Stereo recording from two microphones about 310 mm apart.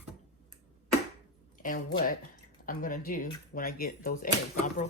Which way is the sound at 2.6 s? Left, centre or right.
Left.